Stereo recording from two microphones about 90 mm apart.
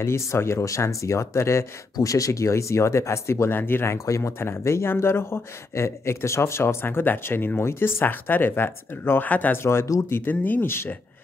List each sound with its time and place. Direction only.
0.0 s speech: 30° left (ahead or behind)
10.1 s speech: 20° left (ahead or behind)